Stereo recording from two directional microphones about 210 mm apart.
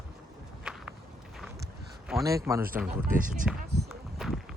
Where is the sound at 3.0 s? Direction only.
40° right (ahead or behind).